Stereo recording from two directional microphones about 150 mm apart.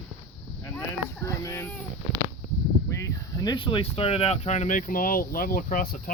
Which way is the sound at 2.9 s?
25° left (ahead or behind).